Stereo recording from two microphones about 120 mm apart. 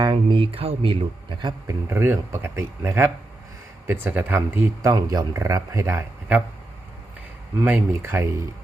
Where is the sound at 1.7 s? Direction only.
20° right (ahead or behind).